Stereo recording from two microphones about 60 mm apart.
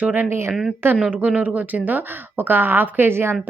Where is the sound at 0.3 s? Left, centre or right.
Right.